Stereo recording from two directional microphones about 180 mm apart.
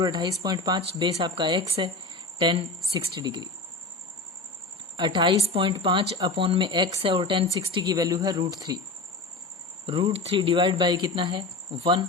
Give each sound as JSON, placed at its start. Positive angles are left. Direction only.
{"t": 0.0, "sound": "speech", "side_deg": -20}
{"t": 4.9, "sound": "speech", "side_deg": -25}
{"t": 9.8, "sound": "speech", "side_deg": -30}